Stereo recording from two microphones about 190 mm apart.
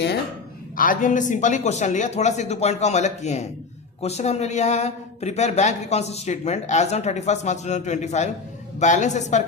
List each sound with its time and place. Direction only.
0.8 s speech: 45° left (ahead or behind)